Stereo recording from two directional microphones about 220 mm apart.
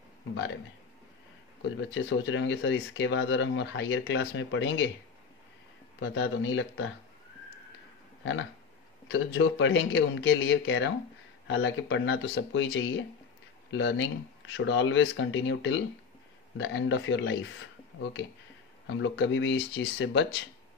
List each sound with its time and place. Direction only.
1.8 s speech: 55° left (ahead or behind)
5.9 s speech: 50° left (ahead or behind)
9.1 s speech: 55° left (ahead or behind)
18.9 s speech: 55° left (ahead or behind)